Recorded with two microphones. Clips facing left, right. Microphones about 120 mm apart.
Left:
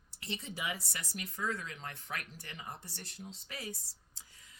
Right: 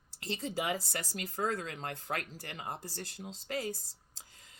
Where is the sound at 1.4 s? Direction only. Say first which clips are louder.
Right 4 dB; 55° right (ahead or behind).